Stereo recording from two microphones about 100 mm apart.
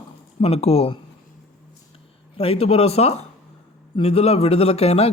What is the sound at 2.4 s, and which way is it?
Speech, 75° left (ahead or behind).